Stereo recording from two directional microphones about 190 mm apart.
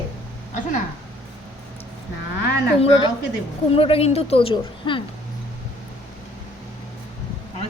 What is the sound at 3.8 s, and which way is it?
A woman's voice, 30° left (ahead or behind).